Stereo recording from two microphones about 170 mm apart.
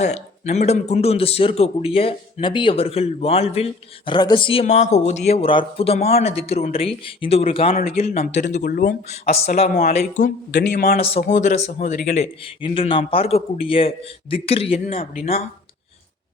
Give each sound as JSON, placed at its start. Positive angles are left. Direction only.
{"t": 0.0, "sound": "speech", "side_deg": 40}
{"t": 8.5, "sound": "speech", "side_deg": 55}
{"t": 9.6, "sound": "speech", "side_deg": 40}
{"t": 10.5, "sound": "a man's voice", "side_deg": 70}
{"t": 10.9, "sound": "speech", "side_deg": 35}